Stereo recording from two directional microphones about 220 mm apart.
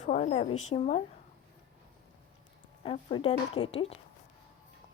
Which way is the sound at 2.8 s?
25° left (ahead or behind).